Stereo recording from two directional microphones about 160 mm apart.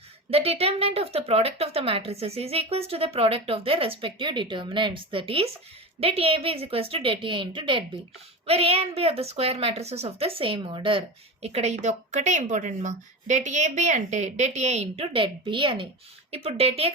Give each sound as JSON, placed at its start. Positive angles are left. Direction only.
{"t": 0.3, "sound": "a woman's voice", "side_deg": -40}